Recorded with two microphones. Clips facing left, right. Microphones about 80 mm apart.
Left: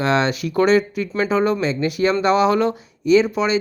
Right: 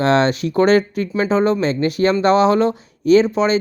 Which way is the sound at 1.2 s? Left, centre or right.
Right.